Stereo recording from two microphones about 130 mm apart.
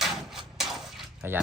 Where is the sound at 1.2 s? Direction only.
15° right (ahead or behind).